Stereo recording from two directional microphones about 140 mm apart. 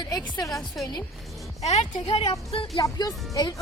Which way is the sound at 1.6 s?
50° left (ahead or behind).